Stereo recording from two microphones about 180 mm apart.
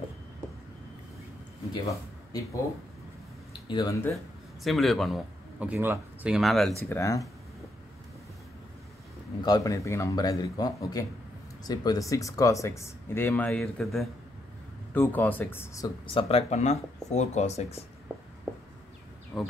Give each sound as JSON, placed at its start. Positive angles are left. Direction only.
{"t": 1.7, "sound": "speech", "side_deg": 20}
{"t": 3.6, "sound": "speech", "side_deg": 25}
{"t": 4.6, "sound": "a man's voice", "side_deg": 0}
{"t": 6.8, "sound": "speech", "side_deg": 15}
{"t": 9.4, "sound": "speech", "side_deg": 20}
{"t": 16.1, "sound": "speech", "side_deg": 30}
{"t": 19.3, "sound": "speech", "side_deg": 0}